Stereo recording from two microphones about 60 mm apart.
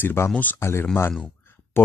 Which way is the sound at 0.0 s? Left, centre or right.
Left.